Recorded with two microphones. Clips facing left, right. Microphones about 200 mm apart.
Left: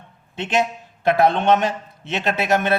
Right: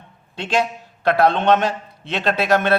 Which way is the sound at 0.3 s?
20° left (ahead or behind).